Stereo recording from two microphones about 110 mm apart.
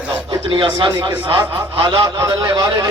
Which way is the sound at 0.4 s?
45° right (ahead or behind).